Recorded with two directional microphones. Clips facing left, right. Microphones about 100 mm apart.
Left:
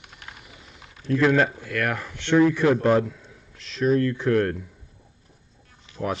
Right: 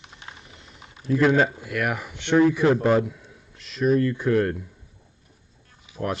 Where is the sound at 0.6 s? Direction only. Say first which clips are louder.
Right 2 dB; centre (ahead or behind).